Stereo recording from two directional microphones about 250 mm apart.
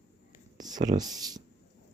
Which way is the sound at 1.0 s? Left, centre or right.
Centre.